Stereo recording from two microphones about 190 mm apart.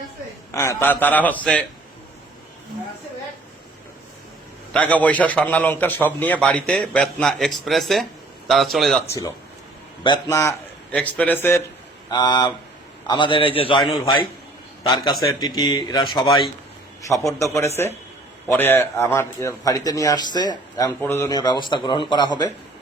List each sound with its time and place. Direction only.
0.5 s a man's voice: 15° left (ahead or behind)
4.7 s a man's voice: 5° left (ahead or behind)
9.0 s a man's voice: 15° left (ahead or behind)